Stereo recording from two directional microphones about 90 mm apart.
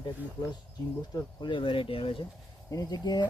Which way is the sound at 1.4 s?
70° left (ahead or behind).